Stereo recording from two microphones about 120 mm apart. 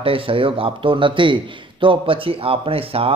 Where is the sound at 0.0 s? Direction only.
50° right (ahead or behind).